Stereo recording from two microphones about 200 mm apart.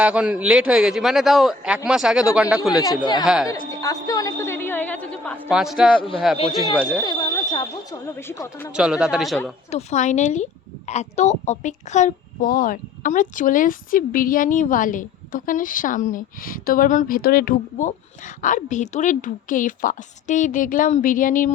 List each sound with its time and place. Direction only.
0.0 s a man's voice: 5° right (ahead or behind)
2.8 s speech: 20° left (ahead or behind)
3.2 s a man's voice: 5° right (ahead or behind)
3.7 s a woman's voice: 15° left (ahead or behind); by 6.4 s centre (ahead or behind)
7.0 s speech: 20° left (ahead or behind)
8.7 s a man's voice: 5° right (ahead or behind)
9.6 s a woman's voice: 35° left (ahead or behind)